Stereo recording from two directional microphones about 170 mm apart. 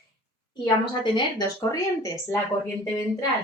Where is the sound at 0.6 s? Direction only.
25° left (ahead or behind).